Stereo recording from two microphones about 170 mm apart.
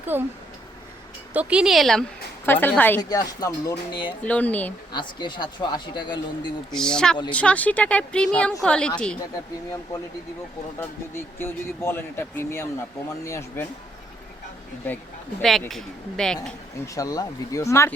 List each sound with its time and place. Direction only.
0.0 s speech: 10° right (ahead or behind)
1.3 s speech: 10° right (ahead or behind)
2.5 s speech: 10° left (ahead or behind)
3.0 s speech: 20° left (ahead or behind)
4.3 s speech: 10° left (ahead or behind)
4.9 s speech: 25° left (ahead or behind)
6.7 s speech: 5° left (ahead or behind)
10.8 s speech: 15° left (ahead or behind)
15.4 s speech: centre (ahead or behind)
16.8 s speech: 20° left (ahead or behind)